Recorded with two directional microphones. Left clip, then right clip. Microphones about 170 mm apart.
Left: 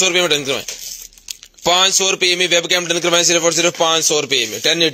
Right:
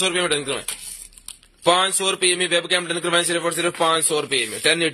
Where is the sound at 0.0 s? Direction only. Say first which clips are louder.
Left 6 dB; 30° left (ahead or behind).